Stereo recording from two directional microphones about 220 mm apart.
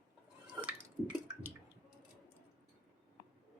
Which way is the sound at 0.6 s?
5° right (ahead or behind).